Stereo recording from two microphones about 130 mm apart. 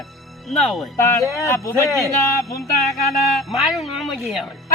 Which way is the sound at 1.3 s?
25° left (ahead or behind).